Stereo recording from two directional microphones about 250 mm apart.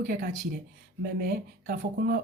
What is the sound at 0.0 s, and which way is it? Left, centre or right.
Speech, right.